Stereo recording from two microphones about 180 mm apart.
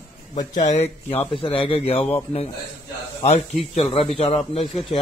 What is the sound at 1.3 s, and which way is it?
Speech, 30° left (ahead or behind).